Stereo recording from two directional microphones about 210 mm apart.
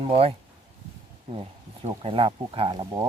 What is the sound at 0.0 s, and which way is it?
Speech, 25° right (ahead or behind).